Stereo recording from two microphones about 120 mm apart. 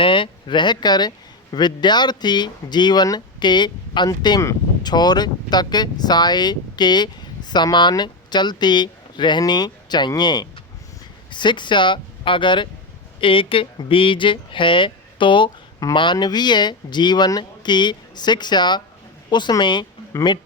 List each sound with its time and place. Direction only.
0.0 s a man's voice: 45° left (ahead or behind)